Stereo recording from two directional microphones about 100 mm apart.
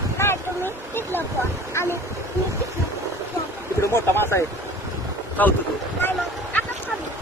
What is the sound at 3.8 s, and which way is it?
Speech, 25° left (ahead or behind).